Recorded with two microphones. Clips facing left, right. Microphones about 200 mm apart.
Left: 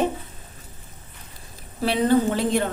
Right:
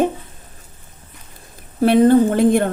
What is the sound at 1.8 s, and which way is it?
Speech, 50° right (ahead or behind).